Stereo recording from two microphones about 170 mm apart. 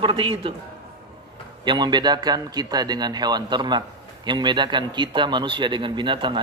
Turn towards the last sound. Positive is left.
turn(degrees=-30)  # may be behind; listen again after turning